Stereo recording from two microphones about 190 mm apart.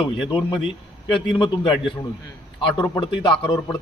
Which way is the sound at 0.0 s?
25° left (ahead or behind).